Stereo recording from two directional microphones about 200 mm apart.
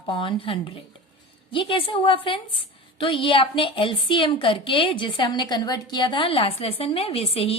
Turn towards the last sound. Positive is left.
turn(degrees=30)  # may be behind; listen again after turning